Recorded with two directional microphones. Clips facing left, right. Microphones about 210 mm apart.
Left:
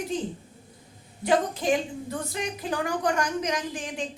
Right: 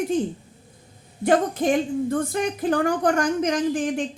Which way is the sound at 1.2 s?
50° right (ahead or behind).